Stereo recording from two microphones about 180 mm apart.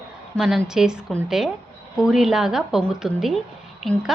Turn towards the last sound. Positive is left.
turn(degrees=0)  # may be behind; listen again after turning